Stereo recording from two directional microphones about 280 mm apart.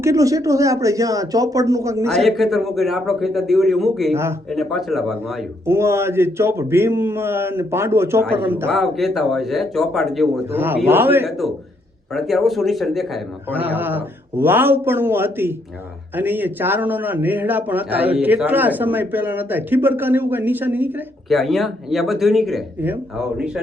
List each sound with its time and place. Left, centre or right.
0.0 s speech: centre
2.0 s a man's voice: centre